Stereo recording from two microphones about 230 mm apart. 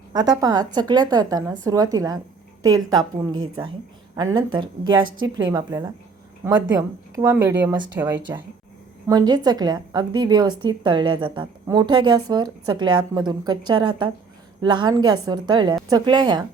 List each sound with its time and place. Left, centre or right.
0.1 s a woman's voice: centre